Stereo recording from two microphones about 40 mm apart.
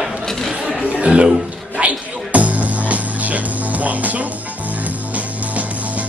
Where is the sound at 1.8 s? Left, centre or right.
Right.